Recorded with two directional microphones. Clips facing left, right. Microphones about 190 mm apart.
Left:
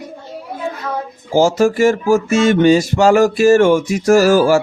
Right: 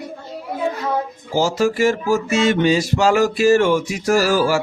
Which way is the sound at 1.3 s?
50° left (ahead or behind).